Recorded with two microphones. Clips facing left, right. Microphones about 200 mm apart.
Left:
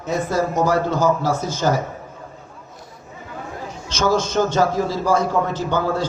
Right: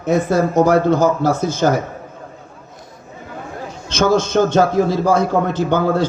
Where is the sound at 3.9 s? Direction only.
60° right (ahead or behind).